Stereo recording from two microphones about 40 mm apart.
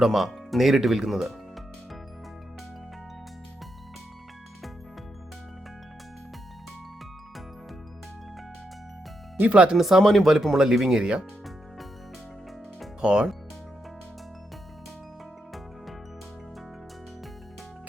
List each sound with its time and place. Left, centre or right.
0.0 s speech: centre
9.5 s speech: right
9.7 s speech: centre
13.0 s speech: centre